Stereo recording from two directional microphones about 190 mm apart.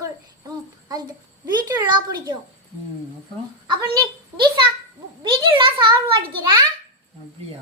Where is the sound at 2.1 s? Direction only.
20° right (ahead or behind).